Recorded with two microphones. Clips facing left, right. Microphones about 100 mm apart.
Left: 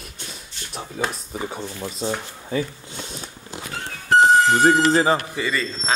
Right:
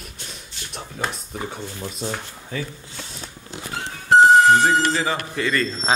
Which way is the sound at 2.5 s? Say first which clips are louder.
Left 5 dB; 15° left (ahead or behind).